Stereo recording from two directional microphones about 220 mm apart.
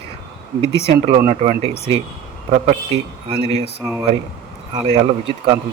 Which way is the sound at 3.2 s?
25° right (ahead or behind).